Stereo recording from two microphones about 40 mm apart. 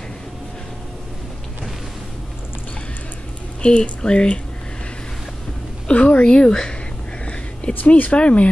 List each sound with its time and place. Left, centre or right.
3.6 s speech: left
5.9 s a woman's voice: left